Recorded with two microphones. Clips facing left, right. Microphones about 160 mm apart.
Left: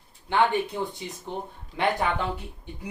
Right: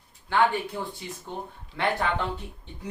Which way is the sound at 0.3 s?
20° left (ahead or behind).